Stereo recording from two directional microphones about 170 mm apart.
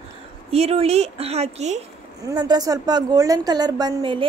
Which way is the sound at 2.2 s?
25° right (ahead or behind).